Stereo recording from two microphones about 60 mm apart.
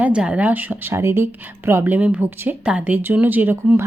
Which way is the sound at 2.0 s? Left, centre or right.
Right.